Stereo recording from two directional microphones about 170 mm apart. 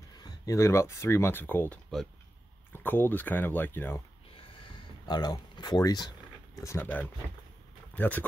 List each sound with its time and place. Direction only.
0.2 s speech: 20° left (ahead or behind)
4.4 s a sound: 30° left (ahead or behind); by 7.1 s 10° left (ahead or behind)
7.9 s speech: 10° left (ahead or behind)